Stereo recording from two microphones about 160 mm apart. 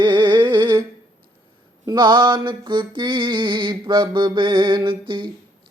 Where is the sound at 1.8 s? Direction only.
25° right (ahead or behind).